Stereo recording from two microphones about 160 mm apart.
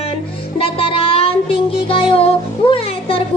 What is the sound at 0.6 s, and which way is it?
Music, 35° left (ahead or behind).